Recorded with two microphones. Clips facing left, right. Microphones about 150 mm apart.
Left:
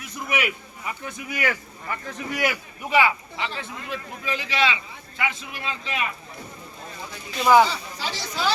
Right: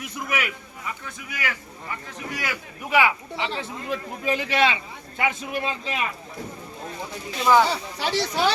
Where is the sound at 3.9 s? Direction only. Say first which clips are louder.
Right 5 dB; 50° right (ahead or behind).